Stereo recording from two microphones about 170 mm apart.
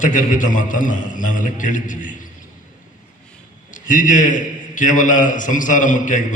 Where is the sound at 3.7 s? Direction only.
50° left (ahead or behind).